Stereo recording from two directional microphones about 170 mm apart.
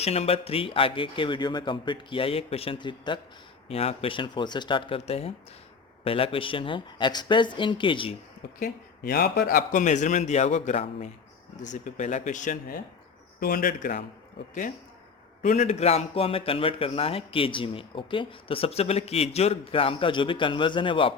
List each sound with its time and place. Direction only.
0.0 s a man's voice: 35° left (ahead or behind)
8.5 s a man's voice: 55° left (ahead or behind)
15.4 s a man's voice: 45° left (ahead or behind)